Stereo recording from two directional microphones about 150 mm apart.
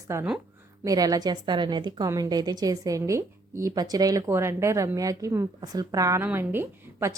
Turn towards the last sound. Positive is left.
turn(degrees=-15)  # may be behind; listen again after turning